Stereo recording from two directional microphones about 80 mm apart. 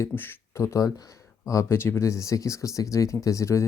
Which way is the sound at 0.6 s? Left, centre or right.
Left.